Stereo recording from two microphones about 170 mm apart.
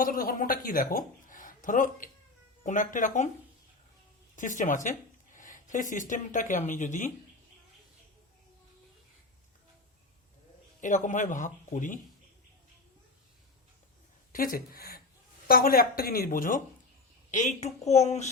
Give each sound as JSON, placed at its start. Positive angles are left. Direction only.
{"t": 0.0, "sound": "speech", "side_deg": 55}
{"t": 4.4, "sound": "speech", "side_deg": 50}
{"t": 10.8, "sound": "speech", "side_deg": 50}
{"t": 14.3, "sound": "speech", "side_deg": 60}
{"t": 17.3, "sound": "a woman's voice", "side_deg": 45}